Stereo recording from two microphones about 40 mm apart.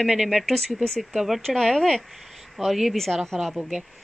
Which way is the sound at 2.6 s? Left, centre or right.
Centre.